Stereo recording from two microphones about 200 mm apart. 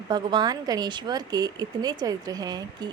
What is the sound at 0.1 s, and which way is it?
Speech, 20° right (ahead or behind).